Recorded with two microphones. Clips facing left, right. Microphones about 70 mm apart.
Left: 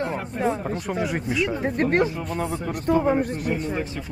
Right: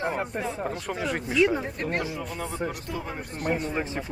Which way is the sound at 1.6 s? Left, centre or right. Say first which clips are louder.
Left 9 dB; left.